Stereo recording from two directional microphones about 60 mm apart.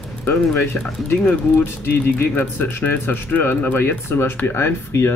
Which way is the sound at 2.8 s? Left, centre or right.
Left.